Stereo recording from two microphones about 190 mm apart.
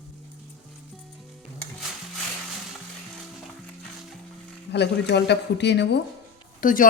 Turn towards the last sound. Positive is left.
turn(degrees=45)  # may be behind; listen again after turning